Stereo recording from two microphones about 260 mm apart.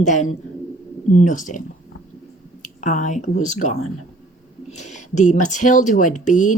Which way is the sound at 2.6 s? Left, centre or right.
Left.